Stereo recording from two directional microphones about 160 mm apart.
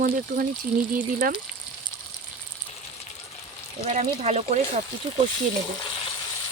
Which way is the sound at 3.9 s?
45° right (ahead or behind).